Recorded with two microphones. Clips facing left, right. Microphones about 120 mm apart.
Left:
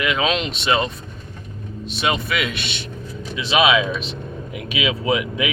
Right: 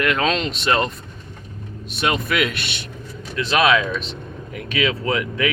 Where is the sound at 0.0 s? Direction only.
5° left (ahead or behind).